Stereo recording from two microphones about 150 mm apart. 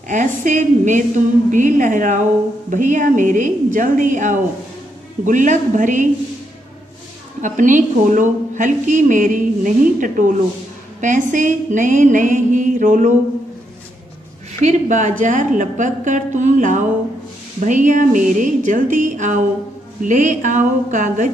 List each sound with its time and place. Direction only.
0.1 s a woman's voice: 55° right (ahead or behind)
7.4 s a woman's voice: 60° right (ahead or behind)
14.6 s a woman's voice: 55° right (ahead or behind)